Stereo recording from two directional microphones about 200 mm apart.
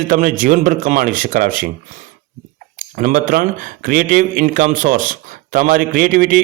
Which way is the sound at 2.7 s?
40° right (ahead or behind).